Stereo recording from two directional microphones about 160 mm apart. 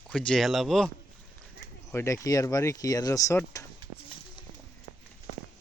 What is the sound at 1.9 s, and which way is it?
Speech, 20° left (ahead or behind).